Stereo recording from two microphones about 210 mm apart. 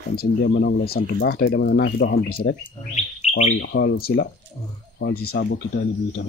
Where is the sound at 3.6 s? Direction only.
55° left (ahead or behind).